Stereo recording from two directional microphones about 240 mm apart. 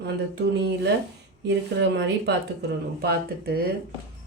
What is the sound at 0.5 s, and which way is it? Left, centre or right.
A woman's voice, right.